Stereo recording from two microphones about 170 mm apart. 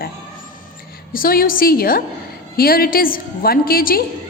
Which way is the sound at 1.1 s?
60° left (ahead or behind).